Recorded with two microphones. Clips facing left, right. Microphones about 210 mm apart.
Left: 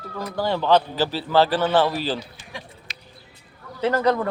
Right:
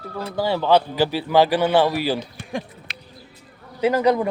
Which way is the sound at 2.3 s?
60° right (ahead or behind).